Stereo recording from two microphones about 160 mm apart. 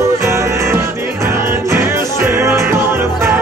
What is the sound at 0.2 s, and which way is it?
Music, 15° right (ahead or behind).